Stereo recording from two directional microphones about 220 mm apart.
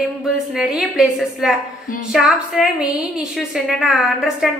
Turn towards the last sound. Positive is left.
turn(degrees=0)  # may be behind; listen again after turning